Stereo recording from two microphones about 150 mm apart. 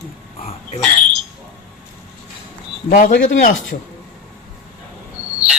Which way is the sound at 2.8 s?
60° left (ahead or behind).